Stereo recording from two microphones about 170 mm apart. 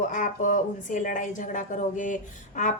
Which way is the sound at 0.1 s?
50° left (ahead or behind).